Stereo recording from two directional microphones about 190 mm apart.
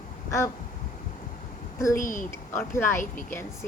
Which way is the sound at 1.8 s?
15° left (ahead or behind).